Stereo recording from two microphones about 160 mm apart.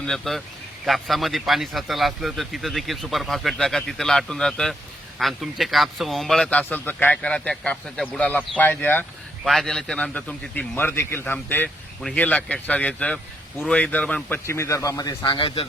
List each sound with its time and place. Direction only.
0.0 s a man's voice: centre (ahead or behind)
9.4 s a man's voice: centre (ahead or behind); by 15.6 s 35° left (ahead or behind)